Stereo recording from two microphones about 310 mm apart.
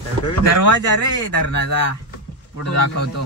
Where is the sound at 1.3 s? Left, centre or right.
Left.